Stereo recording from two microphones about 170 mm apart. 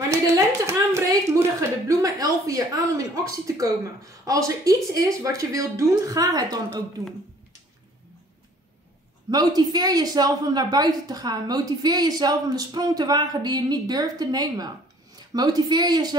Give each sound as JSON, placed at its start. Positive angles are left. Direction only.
{"t": 0.7, "sound": "a woman's voice", "side_deg": -15}
{"t": 9.3, "sound": "a woman's voice", "side_deg": -25}